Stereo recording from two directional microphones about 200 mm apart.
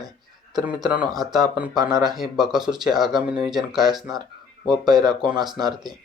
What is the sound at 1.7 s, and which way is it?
Speech, 20° right (ahead or behind).